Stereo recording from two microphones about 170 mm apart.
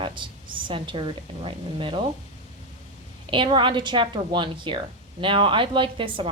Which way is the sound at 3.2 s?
30° right (ahead or behind).